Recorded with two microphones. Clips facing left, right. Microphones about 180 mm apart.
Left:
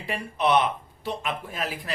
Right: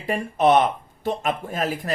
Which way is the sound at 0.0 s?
45° right (ahead or behind).